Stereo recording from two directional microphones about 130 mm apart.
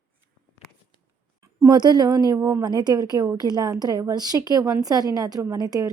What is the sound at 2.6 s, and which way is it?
A woman's voice, 35° right (ahead or behind).